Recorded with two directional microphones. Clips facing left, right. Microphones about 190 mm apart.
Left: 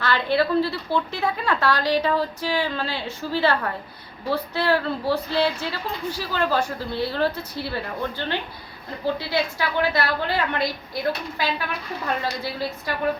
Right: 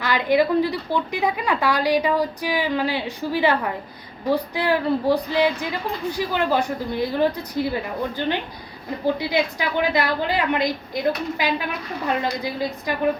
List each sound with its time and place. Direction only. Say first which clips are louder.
0.0 s a woman's voice: right 3 dB; 15° right (ahead or behind)